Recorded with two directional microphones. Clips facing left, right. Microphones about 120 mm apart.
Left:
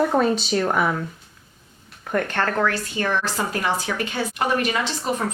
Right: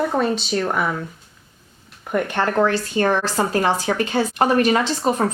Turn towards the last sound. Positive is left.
turn(degrees=-40)  # may be behind; listen again after turning